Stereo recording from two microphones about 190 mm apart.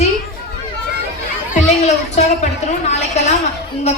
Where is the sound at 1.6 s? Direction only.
35° left (ahead or behind).